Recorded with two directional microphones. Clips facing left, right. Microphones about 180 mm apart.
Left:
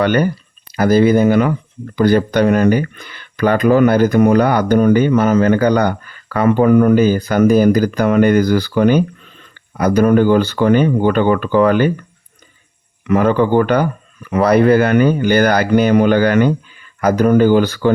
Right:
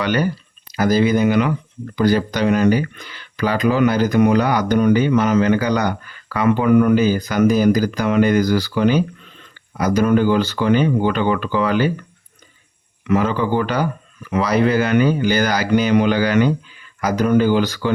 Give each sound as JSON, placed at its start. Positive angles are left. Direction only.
{"t": 0.0, "sound": "speech", "side_deg": 50}
{"t": 13.1, "sound": "speech", "side_deg": 55}